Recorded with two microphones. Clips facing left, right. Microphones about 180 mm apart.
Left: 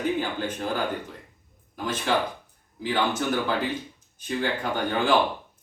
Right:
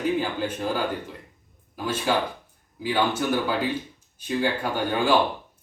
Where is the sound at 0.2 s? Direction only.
10° right (ahead or behind).